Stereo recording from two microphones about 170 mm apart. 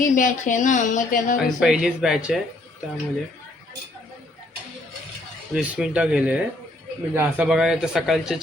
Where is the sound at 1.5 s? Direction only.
5° right (ahead or behind).